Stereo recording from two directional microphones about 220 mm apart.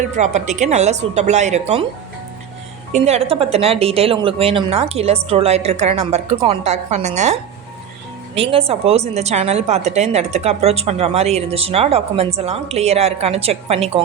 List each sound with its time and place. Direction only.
0.2 s speech: 35° right (ahead or behind)
2.9 s speech: 30° right (ahead or behind)
8.4 s speech: 25° right (ahead or behind)